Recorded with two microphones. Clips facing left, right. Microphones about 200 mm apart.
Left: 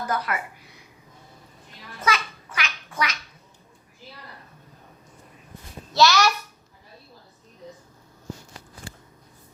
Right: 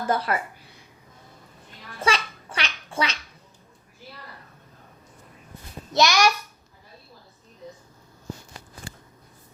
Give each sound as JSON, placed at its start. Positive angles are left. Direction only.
{"t": 0.0, "sound": "a sound", "side_deg": -30}
{"t": 2.0, "sound": "babbling", "side_deg": -30}
{"t": 5.9, "sound": "a child's voice", "side_deg": -15}